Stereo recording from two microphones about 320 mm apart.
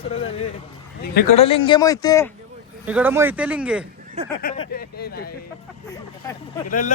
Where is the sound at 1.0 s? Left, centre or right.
Left.